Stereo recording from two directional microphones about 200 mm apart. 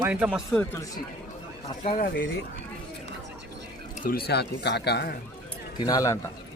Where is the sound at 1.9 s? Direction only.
45° left (ahead or behind).